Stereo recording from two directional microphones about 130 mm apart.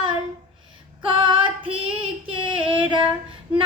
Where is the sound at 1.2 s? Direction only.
40° right (ahead or behind).